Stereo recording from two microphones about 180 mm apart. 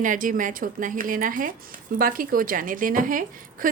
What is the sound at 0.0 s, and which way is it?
A woman's voice, 45° right (ahead or behind).